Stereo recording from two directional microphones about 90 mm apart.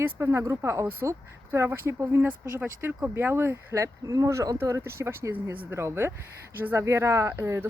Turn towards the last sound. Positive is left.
turn(degrees=-30)  # may be behind; listen again after turning